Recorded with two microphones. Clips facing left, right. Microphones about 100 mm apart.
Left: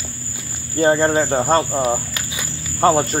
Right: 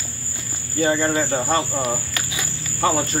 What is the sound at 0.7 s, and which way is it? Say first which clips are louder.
Cricket: left 4 dB; 40° left (ahead or behind).